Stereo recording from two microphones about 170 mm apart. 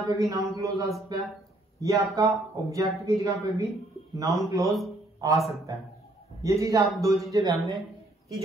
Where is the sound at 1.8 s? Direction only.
20° right (ahead or behind).